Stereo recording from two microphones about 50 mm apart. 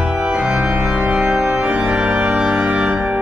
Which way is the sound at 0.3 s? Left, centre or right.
Right.